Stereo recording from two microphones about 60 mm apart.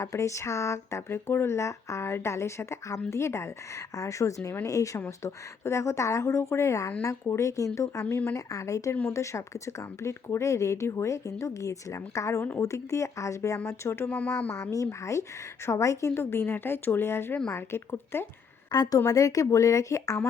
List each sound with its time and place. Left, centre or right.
0.0 s speech: left
1.5 s speech: left
3.9 s speech: left
5.2 s speech: left
13.7 s speech: left
14.1 s speech: left
15.6 s speech: left
16.1 s a woman's voice: left
18.7 s a woman's voice: left
19.0 s speech: left